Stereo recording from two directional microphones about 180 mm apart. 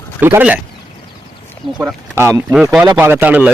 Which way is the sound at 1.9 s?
15° right (ahead or behind).